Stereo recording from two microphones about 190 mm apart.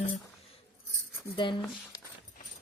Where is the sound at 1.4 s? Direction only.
25° left (ahead or behind).